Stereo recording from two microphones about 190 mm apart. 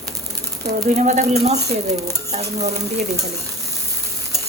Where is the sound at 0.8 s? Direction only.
40° right (ahead or behind).